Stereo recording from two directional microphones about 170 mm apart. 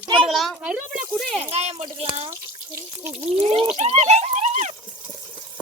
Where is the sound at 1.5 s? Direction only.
40° right (ahead or behind).